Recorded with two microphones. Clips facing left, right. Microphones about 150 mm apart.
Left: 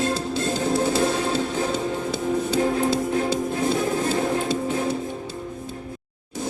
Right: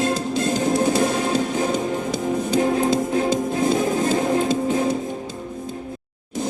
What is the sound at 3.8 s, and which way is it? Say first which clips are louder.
Music: right 3 dB; 20° right (ahead or behind).